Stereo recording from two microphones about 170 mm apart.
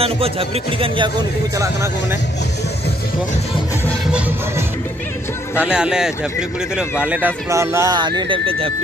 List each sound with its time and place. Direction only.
0.0 s speech: 35° right (ahead or behind)
5.6 s a man's voice: 5° right (ahead or behind); by 8.7 s 30° right (ahead or behind)